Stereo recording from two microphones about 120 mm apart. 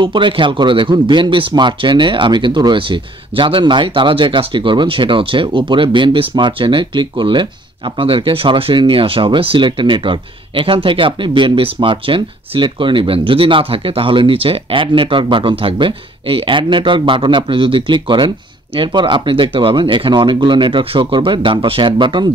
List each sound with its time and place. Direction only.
0.0 s speech: 45° right (ahead or behind)